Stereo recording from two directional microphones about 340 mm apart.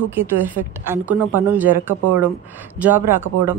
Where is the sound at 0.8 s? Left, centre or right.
Centre.